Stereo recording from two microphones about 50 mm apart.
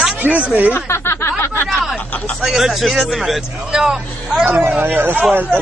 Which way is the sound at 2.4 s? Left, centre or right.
Centre.